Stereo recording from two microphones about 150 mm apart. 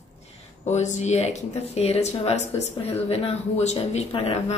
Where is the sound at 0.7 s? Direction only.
50° left (ahead or behind).